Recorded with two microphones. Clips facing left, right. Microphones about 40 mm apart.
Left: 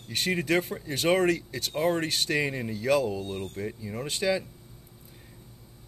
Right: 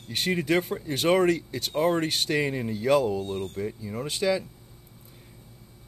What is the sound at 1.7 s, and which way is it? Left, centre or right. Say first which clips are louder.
Speech: right 2 dB; centre.